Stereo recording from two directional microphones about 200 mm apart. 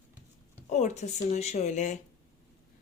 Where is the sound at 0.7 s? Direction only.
35° left (ahead or behind).